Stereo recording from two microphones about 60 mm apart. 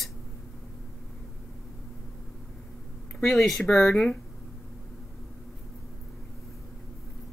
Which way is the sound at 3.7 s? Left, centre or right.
Left.